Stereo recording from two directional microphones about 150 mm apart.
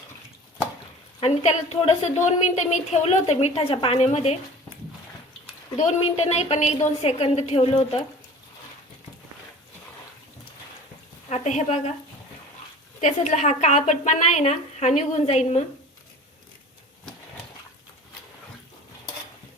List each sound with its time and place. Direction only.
1.2 s a woman's voice: 40° left (ahead or behind)
5.7 s a woman's voice: 50° left (ahead or behind)
11.3 s a woman's voice: 50° left (ahead or behind)
13.0 s a woman's voice: 50° left (ahead or behind)